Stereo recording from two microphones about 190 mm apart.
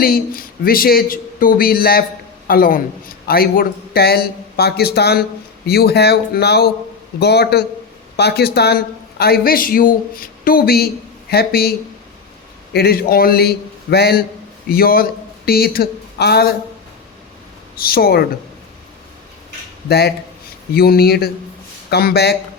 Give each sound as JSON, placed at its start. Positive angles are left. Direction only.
{"t": 0.0, "sound": "a man's voice", "side_deg": 50}
{"t": 12.7, "sound": "a man's voice", "side_deg": 55}
{"t": 17.7, "sound": "a man's voice", "side_deg": 50}
{"t": 19.9, "sound": "speech", "side_deg": 55}